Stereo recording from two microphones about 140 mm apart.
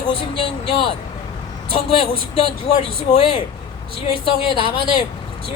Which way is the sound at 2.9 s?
40° left (ahead or behind).